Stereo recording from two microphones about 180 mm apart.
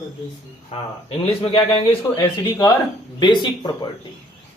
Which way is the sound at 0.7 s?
35° left (ahead or behind).